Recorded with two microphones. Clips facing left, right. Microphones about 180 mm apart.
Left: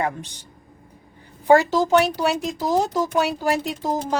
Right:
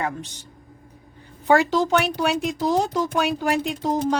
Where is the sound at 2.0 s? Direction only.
35° left (ahead or behind).